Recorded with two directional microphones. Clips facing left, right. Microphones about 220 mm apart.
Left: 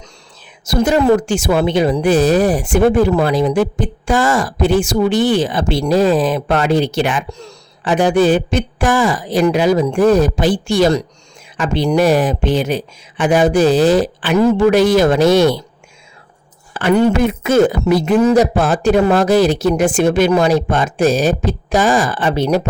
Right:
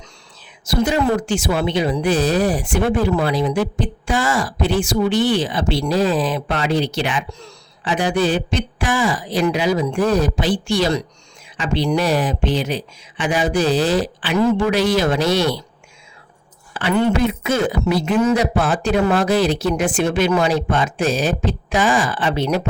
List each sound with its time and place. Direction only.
0.6 s a woman's voice: 45° left (ahead or behind)
16.7 s a woman's voice: 45° left (ahead or behind)